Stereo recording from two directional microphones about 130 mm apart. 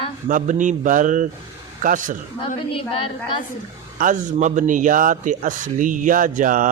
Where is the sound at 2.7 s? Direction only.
45° left (ahead or behind).